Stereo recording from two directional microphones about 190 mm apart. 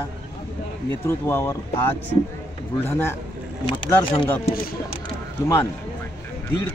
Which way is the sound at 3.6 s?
25° left (ahead or behind).